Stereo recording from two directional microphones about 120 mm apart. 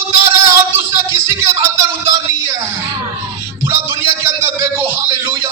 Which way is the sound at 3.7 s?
20° right (ahead or behind).